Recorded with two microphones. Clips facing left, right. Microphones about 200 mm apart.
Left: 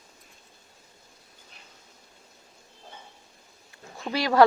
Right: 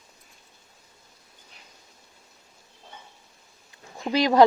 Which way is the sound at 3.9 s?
20° right (ahead or behind).